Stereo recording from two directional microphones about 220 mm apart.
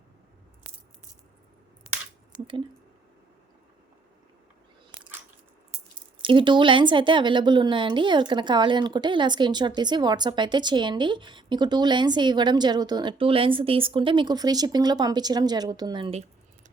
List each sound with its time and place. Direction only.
6.2 s a woman's voice: 20° right (ahead or behind)